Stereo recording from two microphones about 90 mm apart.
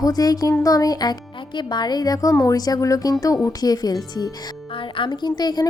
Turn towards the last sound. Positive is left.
turn(degrees=50)  # may be behind; listen again after turning